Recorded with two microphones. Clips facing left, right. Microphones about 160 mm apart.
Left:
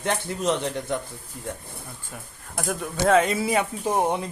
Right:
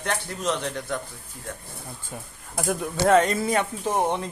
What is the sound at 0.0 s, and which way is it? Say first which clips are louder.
Speech: left 3 dB; 20° left (ahead or behind).